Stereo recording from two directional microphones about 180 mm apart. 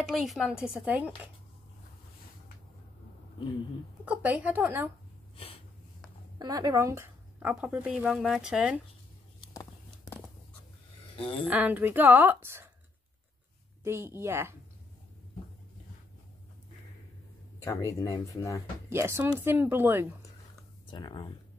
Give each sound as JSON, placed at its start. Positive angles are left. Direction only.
{"t": 0.1, "sound": "a woman's voice", "side_deg": 0}
{"t": 4.0, "sound": "a woman's voice", "side_deg": -10}
{"t": 6.3, "sound": "a woman's voice", "side_deg": -20}
{"t": 9.5, "sound": "a sound", "side_deg": 15}
{"t": 11.1, "sound": "speech", "side_deg": 30}
{"t": 11.4, "sound": "a woman's voice", "side_deg": -10}
{"t": 13.8, "sound": "a woman's voice", "side_deg": -15}
{"t": 17.6, "sound": "speech", "side_deg": 15}
{"t": 18.9, "sound": "a woman's voice", "side_deg": -15}
{"t": 20.9, "sound": "speech", "side_deg": 25}